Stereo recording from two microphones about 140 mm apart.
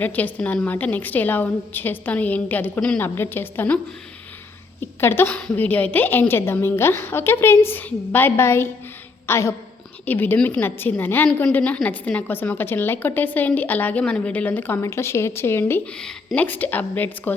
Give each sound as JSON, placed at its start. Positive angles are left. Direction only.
{"t": 0.0, "sound": "a woman's voice", "side_deg": 10}
{"t": 4.9, "sound": "a woman's voice", "side_deg": 15}